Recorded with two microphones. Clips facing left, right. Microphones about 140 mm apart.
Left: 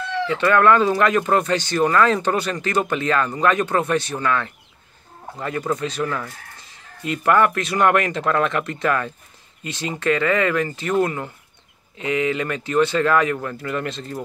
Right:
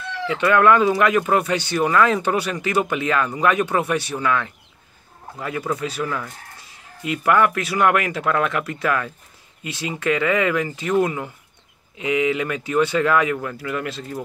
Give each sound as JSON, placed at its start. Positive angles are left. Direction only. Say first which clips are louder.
{"t": 0.3, "sound": "speech", "louder": "even", "side_deg": -15}